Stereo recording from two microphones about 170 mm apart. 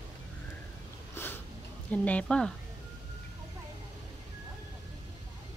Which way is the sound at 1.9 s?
10° left (ahead or behind).